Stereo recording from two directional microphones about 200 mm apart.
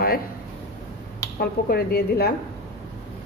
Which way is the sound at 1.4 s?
50° left (ahead or behind).